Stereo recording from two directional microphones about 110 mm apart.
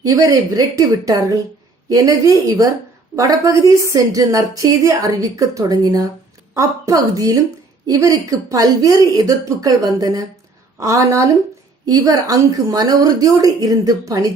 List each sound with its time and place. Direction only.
0.0 s a woman's voice: 35° right (ahead or behind)